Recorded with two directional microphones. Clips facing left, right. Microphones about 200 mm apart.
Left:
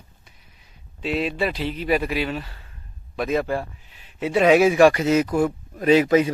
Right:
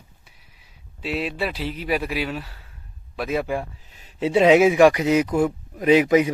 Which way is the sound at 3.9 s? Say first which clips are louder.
Right 2 dB; 40° right (ahead or behind).